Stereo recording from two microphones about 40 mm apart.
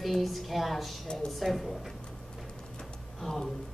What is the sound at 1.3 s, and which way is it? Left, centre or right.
Speech, centre.